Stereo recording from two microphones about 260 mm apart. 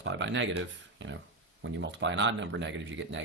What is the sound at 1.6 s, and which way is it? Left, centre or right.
Speech, right.